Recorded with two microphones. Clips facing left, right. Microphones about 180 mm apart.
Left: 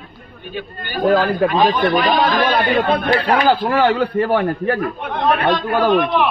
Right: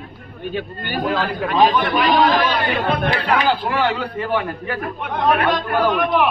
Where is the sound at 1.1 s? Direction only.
45° left (ahead or behind).